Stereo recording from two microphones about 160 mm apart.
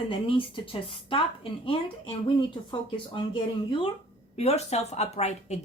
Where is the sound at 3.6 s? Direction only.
30° left (ahead or behind).